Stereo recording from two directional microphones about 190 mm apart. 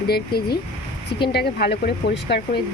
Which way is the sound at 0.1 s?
55° left (ahead or behind).